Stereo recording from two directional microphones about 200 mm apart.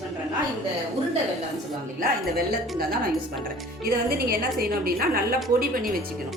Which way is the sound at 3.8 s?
50° right (ahead or behind).